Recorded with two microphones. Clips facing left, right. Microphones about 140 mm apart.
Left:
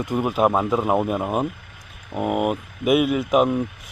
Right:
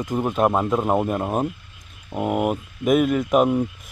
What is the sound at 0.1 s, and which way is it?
Speech, 5° left (ahead or behind).